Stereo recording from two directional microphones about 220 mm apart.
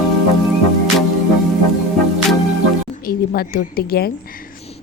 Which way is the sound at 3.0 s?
45° left (ahead or behind).